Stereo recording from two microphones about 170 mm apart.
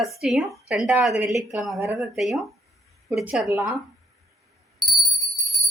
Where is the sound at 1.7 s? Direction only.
15° right (ahead or behind).